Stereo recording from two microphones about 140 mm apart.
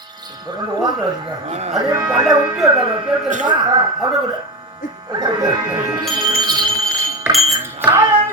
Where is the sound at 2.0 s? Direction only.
5° right (ahead or behind).